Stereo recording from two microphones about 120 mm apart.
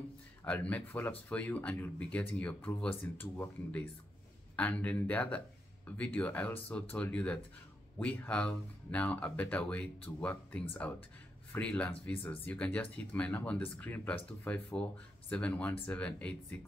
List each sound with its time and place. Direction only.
0.4 s speech: 10° left (ahead or behind)